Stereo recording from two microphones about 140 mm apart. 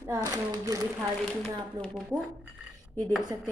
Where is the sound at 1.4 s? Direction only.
Centre (ahead or behind).